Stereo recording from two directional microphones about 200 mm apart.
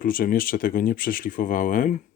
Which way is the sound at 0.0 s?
45° left (ahead or behind).